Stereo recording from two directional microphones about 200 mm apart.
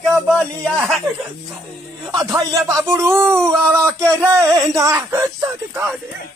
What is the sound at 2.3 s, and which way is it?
Speech, 15° right (ahead or behind).